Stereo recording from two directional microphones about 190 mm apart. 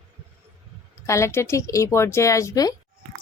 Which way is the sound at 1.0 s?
15° left (ahead or behind).